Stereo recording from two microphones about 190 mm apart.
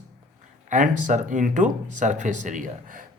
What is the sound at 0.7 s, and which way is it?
Speech, 40° right (ahead or behind).